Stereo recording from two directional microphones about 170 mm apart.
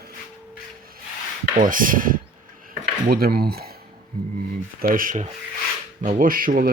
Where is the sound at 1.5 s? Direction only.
50° right (ahead or behind).